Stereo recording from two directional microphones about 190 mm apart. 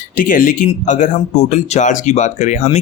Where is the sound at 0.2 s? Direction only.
45° left (ahead or behind).